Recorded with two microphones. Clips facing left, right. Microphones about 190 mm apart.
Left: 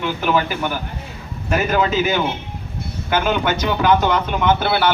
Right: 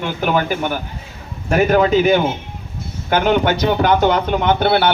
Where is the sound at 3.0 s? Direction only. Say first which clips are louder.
Right 4 dB; 40° right (ahead or behind).